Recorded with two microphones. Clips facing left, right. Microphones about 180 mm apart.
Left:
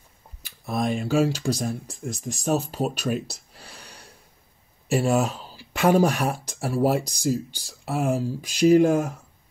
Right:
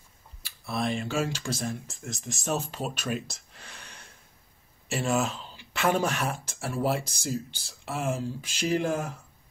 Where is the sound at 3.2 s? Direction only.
35° left (ahead or behind).